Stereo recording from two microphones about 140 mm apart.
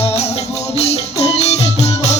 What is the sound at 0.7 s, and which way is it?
Music, 50° left (ahead or behind).